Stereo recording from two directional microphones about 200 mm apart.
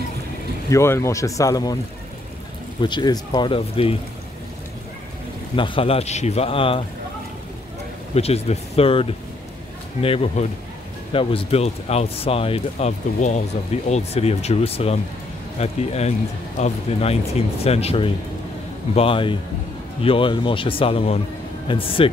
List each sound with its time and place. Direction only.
0.7 s speech: 15° left (ahead or behind)
2.8 s speech: 20° left (ahead or behind)
5.6 s speech: 30° left (ahead or behind)
8.1 s speech: 30° left (ahead or behind)